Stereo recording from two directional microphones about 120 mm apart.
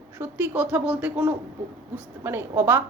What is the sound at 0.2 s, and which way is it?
A woman's voice, 15° right (ahead or behind).